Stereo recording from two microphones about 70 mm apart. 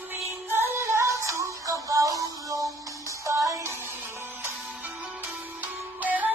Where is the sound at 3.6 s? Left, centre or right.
Right.